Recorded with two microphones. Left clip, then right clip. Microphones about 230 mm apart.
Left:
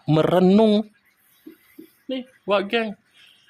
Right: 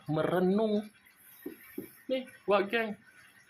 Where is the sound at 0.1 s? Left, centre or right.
Left.